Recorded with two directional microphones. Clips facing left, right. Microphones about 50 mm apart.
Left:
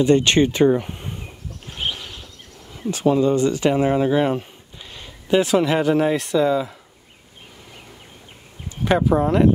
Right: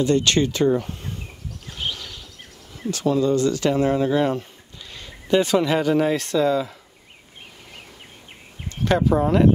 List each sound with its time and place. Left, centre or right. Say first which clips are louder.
0.0 s speech: left 3 dB; left
1.7 s a sound: left 2 dB; left
2.9 s speech: left 2 dB; left
8.6 s speech: left 1 dB; centre